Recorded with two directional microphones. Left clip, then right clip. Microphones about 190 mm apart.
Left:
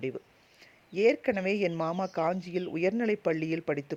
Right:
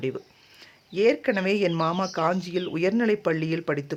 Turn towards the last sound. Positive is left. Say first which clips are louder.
# right 4 dB
turn(degrees=35)  # may be behind; listen again after turning